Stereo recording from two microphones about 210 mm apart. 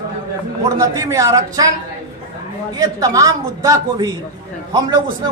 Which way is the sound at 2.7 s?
15° right (ahead or behind).